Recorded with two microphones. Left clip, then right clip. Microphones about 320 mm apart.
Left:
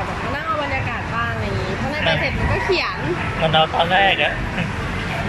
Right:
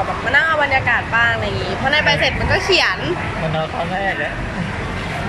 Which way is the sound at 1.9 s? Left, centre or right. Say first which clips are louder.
Right 6 dB; right.